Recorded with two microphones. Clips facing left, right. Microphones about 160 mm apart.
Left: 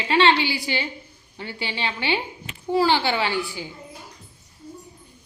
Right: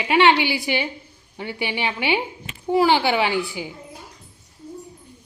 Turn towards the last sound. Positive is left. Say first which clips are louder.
# right 3 dB
turn(degrees=-15)  # may be behind; listen again after turning